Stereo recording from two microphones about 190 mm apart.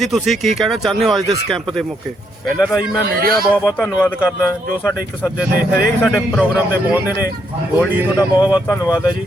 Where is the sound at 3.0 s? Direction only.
55° right (ahead or behind).